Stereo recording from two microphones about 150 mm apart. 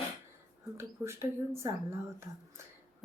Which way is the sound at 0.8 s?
15° right (ahead or behind).